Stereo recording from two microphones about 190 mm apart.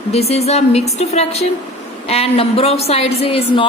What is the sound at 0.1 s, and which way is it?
Speech, 35° left (ahead or behind).